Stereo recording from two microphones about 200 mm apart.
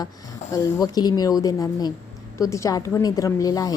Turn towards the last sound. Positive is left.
turn(degrees=20)  # may be behind; listen again after turning